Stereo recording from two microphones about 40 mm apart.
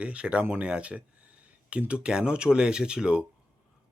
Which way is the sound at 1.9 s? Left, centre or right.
Right.